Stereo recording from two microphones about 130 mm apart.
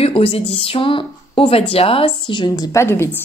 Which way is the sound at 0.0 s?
45° left (ahead or behind).